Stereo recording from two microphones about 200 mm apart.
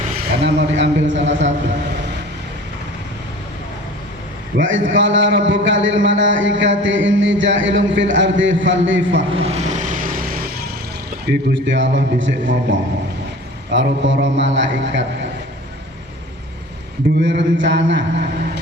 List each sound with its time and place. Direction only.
0.4 s a man's voice: 65° right (ahead or behind)
4.5 s a man's voice: 65° right (ahead or behind)
9.3 s vehicle: 30° right (ahead or behind); by 10.4 s 45° right (ahead or behind)
11.3 s a man's voice: 65° right (ahead or behind)
17.2 s a man's voice: 65° right (ahead or behind)